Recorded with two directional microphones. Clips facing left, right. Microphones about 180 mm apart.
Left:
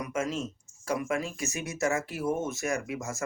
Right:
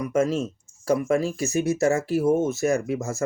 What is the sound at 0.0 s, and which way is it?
Speech, 35° right (ahead or behind).